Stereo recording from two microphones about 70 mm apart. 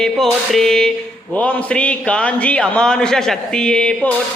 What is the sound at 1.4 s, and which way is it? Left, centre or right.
A man's voice, centre.